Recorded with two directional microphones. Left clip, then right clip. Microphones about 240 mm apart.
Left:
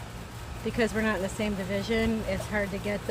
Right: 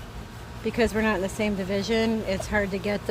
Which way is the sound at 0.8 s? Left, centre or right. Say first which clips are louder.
Right 4 dB; right.